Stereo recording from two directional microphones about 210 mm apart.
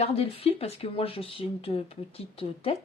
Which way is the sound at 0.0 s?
30° left (ahead or behind).